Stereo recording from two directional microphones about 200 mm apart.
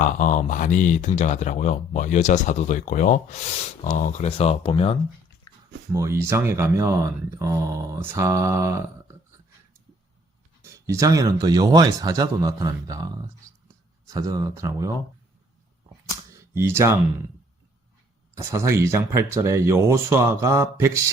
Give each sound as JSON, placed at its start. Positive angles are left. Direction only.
{"t": 0.0, "sound": "speech", "side_deg": 40}
{"t": 5.9, "sound": "speech", "side_deg": -15}
{"t": 10.6, "sound": "speech", "side_deg": -15}
{"t": 14.1, "sound": "speech", "side_deg": -15}
{"t": 16.3, "sound": "a sound", "side_deg": -10}
{"t": 18.3, "sound": "speech", "side_deg": -15}